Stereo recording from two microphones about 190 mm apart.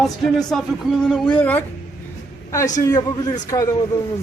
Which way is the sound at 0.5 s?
Centre (ahead or behind).